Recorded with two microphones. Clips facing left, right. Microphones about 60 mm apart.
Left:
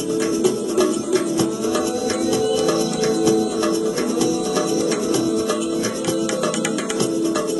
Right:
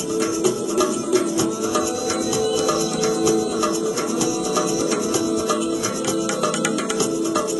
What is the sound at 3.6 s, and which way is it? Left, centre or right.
Music, centre.